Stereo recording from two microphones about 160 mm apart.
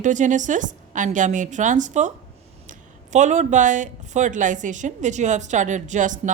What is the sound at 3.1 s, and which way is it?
A woman's voice, 50° right (ahead or behind).